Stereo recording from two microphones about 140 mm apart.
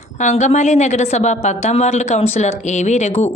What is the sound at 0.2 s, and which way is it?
A woman's voice, 55° left (ahead or behind).